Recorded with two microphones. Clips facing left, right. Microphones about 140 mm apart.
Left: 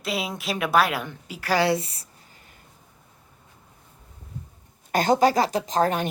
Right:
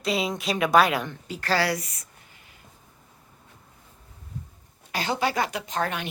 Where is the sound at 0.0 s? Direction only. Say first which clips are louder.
Right 3 dB; 5° left (ahead or behind).